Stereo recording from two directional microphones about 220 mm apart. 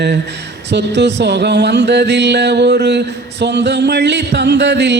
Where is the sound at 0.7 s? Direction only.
50° right (ahead or behind).